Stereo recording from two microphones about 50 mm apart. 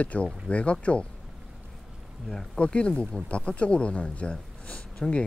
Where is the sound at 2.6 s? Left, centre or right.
Left.